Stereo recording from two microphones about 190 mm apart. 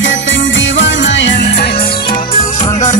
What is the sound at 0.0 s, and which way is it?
Music, 80° left.